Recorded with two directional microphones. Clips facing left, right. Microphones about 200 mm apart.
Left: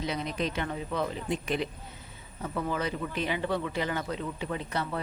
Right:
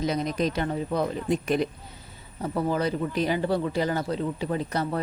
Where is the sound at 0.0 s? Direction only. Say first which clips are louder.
Right 6 dB; 40° right (ahead or behind).